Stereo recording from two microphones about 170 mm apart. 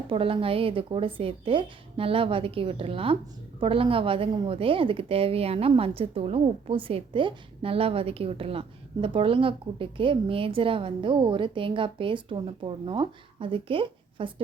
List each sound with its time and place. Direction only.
0.1 s a woman's voice: 35° right (ahead or behind)